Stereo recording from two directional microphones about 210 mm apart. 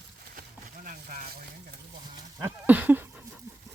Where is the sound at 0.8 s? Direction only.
40° right (ahead or behind).